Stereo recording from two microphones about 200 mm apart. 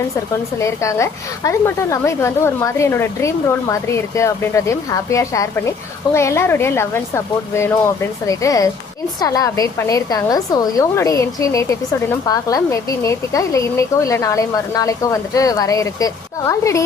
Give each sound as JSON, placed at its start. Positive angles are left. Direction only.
{"t": 0.6, "sound": "a woman's voice", "side_deg": 15}